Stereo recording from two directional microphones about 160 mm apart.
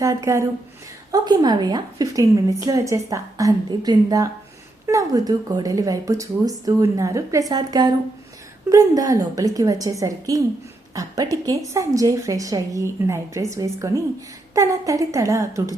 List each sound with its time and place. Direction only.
0.0 s a woman's voice: 20° right (ahead or behind)